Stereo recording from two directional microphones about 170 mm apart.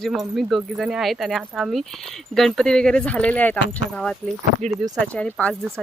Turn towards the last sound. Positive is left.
turn(degrees=5)  # may be behind; listen again after turning